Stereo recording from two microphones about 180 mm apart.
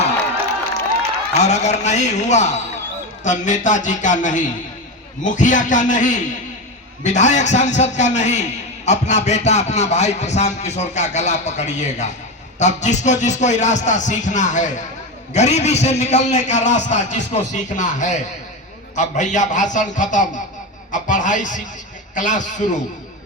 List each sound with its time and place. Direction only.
1.4 s a man's voice: 40° left (ahead or behind)